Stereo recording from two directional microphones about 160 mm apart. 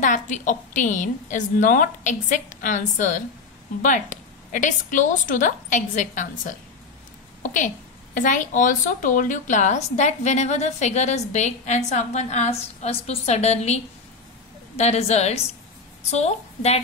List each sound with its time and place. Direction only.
0.0 s a woman's voice: 50° left (ahead or behind)
7.5 s a woman's voice: 55° left (ahead or behind)
14.8 s a woman's voice: 40° left (ahead or behind)